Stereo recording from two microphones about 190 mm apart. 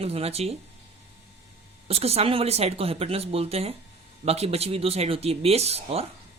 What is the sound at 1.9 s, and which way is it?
Speech, 35° right (ahead or behind).